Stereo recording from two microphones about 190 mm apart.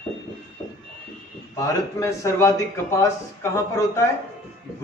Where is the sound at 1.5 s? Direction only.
15° left (ahead or behind).